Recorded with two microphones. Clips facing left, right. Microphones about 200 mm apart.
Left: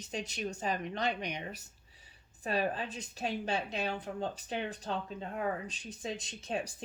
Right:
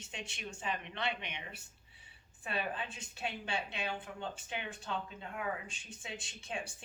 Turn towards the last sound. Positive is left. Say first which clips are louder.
# left 6 dB
turn(degrees=40)  # may be behind; listen again after turning